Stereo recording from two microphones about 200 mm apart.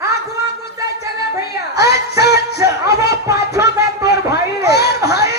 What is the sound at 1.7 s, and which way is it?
Music, 55° left (ahead or behind).